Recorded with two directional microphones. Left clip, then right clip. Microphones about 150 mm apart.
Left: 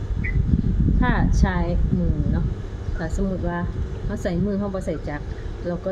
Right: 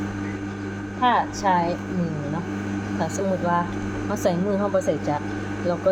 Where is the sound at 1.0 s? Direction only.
55° right (ahead or behind).